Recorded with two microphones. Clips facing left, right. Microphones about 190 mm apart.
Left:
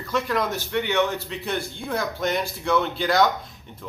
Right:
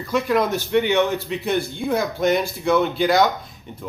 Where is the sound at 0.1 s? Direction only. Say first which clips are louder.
Right 5 dB; 15° right (ahead or behind).